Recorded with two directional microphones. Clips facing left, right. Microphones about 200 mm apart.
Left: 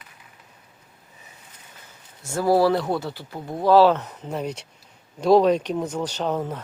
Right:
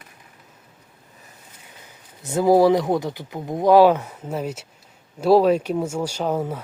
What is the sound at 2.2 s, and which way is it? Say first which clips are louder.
Speech: right 4 dB; 20° right (ahead or behind).